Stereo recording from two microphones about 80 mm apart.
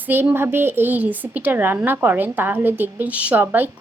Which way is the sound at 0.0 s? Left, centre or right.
Right.